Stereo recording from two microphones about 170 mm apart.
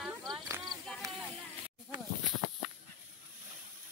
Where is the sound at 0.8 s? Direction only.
5° left (ahead or behind).